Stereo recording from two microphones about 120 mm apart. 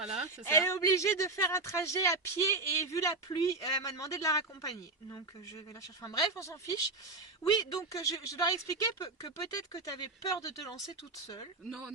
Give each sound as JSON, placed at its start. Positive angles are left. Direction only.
{"t": 0.4, "sound": "speech", "side_deg": 25}